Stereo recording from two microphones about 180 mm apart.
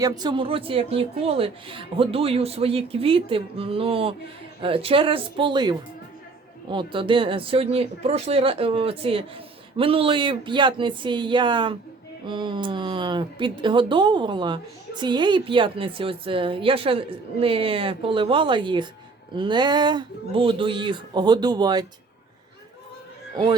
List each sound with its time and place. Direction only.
0.0 s a woman's voice: 25° right (ahead or behind)